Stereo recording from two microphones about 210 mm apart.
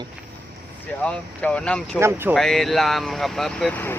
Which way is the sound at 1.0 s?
5° left (ahead or behind).